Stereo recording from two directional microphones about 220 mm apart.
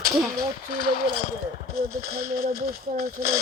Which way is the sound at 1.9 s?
45° right (ahead or behind).